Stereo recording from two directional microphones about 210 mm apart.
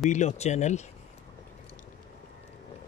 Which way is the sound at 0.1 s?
35° left (ahead or behind).